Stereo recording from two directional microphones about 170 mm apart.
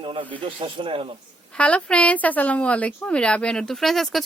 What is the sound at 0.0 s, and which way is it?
Speech, 30° right (ahead or behind).